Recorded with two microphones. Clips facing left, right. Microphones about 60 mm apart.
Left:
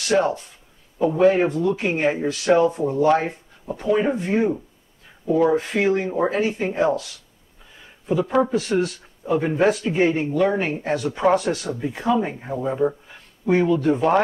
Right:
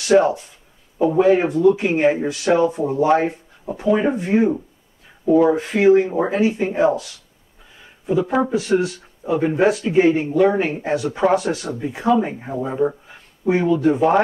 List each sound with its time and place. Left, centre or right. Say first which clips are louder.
0.0 s speech: right 5 dB; centre
0.9 s a man's voice: right 5 dB; centre
1.2 s speech: right 3 dB; centre
8.1 s speech: right 1 dB; centre